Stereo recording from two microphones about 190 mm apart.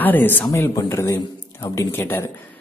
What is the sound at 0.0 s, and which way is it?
Speech, 10° left (ahead or behind).